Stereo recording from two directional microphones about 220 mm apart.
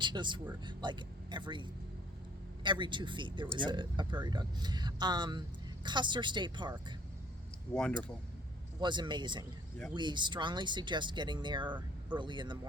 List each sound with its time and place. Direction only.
0.0 s speech: 20° right (ahead or behind)
2.6 s speech: 20° right (ahead or behind)
7.7 s speech: 5° left (ahead or behind)
8.8 s speech: 20° right (ahead or behind)